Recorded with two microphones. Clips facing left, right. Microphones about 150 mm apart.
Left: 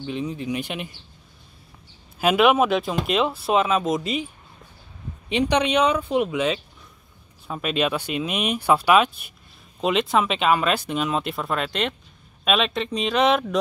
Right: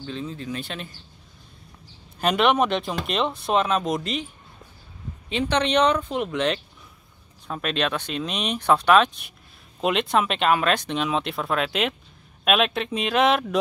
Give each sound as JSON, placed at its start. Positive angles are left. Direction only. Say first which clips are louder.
{"t": 0.0, "sound": "speech", "louder": "left 4 dB", "side_deg": 15}
{"t": 2.1, "sound": "speech", "louder": "left 3 dB", "side_deg": 5}
{"t": 5.3, "sound": "speech", "louder": "left 2 dB", "side_deg": 15}